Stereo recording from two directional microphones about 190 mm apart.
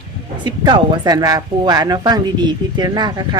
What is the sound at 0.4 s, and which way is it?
A woman's voice, 25° right (ahead or behind).